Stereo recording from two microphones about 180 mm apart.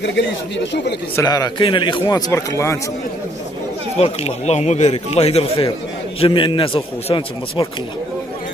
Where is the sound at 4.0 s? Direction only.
35° left (ahead or behind).